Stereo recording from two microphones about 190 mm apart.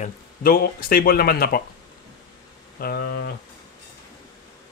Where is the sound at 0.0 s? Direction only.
50° left (ahead or behind).